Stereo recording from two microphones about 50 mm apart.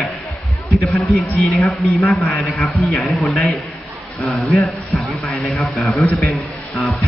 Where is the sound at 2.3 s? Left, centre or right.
Left.